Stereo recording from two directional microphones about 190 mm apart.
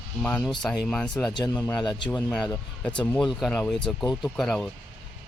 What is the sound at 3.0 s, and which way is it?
Speech, 5° left (ahead or behind).